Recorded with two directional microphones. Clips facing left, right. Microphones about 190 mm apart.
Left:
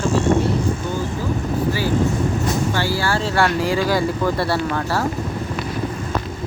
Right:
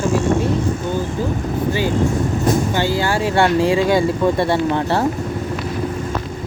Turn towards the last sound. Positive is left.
turn(degrees=-25)  # may be behind; listen again after turning